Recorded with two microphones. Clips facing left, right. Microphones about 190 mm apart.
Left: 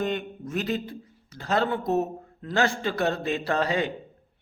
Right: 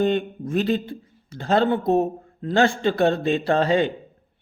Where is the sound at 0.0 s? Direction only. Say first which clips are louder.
Right 7 dB; 30° right (ahead or behind).